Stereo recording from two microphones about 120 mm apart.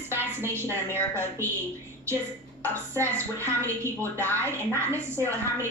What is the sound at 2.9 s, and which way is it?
A woman's voice, 25° right (ahead or behind).